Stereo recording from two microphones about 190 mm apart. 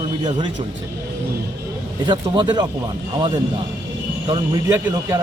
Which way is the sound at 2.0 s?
25° right (ahead or behind).